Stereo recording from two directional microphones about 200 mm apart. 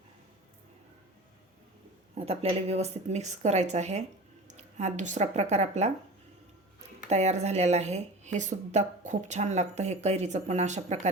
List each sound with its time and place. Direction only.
2.1 s speech: 30° right (ahead or behind)
7.1 s speech: 35° right (ahead or behind)